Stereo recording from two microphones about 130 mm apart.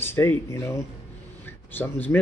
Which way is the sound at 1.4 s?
15° left (ahead or behind).